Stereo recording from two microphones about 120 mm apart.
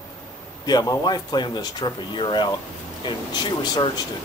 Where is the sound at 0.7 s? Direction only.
35° left (ahead or behind).